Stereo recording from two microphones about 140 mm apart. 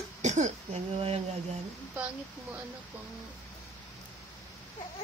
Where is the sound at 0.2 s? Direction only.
55° right (ahead or behind).